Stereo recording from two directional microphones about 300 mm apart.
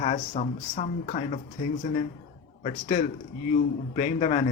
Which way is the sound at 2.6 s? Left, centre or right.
Left.